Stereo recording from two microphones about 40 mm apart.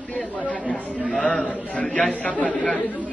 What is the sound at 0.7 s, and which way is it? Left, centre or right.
A man's voice, left.